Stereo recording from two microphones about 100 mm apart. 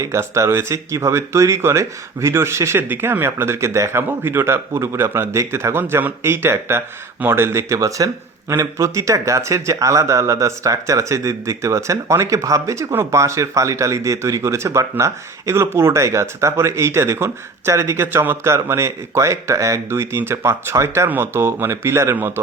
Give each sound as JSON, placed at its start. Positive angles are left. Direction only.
{"t": 0.0, "sound": "speech", "side_deg": -30}